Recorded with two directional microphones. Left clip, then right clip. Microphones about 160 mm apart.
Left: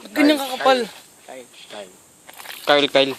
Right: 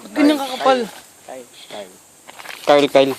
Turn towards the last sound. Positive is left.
turn(degrees=-5)  # may be behind; listen again after turning